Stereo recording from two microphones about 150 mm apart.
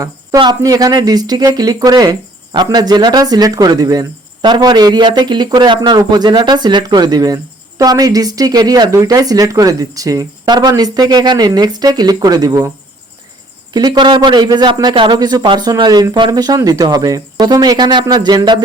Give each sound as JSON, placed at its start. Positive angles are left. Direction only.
{"t": 0.0, "sound": "speech", "side_deg": -25}
{"t": 13.7, "sound": "speech", "side_deg": -30}